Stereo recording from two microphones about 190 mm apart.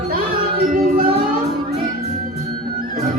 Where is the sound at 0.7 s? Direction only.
50° right (ahead or behind).